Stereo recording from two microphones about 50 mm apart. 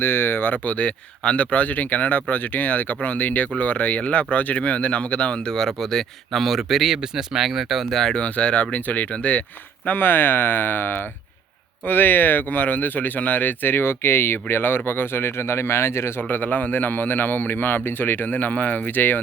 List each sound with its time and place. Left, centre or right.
0.0 s speech: left
5.5 s speech: centre
8.1 s speech: left
9.8 s a man's voice: left
16.3 s a man's voice: left